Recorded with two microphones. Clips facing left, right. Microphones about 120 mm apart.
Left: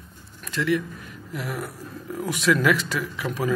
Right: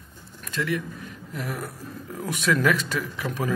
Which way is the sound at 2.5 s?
30° right (ahead or behind).